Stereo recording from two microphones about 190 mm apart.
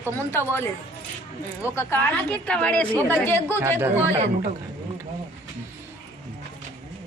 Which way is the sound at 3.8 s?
10° right (ahead or behind).